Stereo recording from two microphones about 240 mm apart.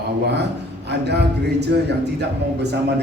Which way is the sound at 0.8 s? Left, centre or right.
Right.